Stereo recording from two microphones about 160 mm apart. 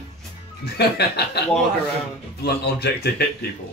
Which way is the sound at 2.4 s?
90° left.